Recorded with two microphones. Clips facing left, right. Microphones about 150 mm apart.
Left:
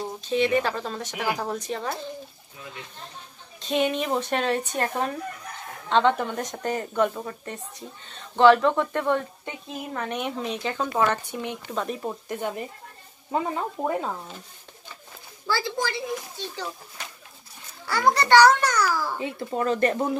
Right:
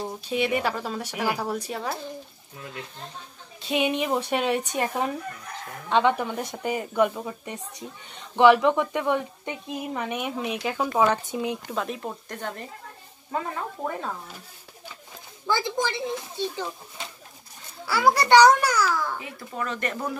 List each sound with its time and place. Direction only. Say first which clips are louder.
0.2 s speech: left 3 dB; 10° right (ahead or behind)
3.6 s speech: even; 10° right (ahead or behind)
11.7 s speech: left 1 dB; centre (ahead or behind); by 14.1 s 15° left (ahead or behind)
15.4 s a child's voice: right 1 dB; 20° right (ahead or behind)
17.8 s speech: right 1 dB; 5° right (ahead or behind)
18.7 s a child's voice: even; centre (ahead or behind)
19.1 s speech: left 6 dB; 30° left (ahead or behind)